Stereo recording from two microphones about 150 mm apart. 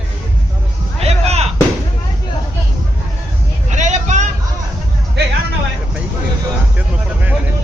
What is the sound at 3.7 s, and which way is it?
Vehicle, 55° right (ahead or behind).